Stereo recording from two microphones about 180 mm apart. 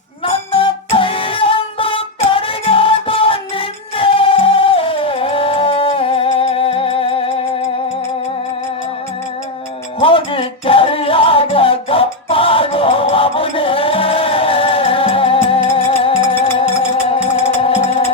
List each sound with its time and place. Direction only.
0.3 s music: 30° left (ahead or behind)
10.0 s music: 30° left (ahead or behind)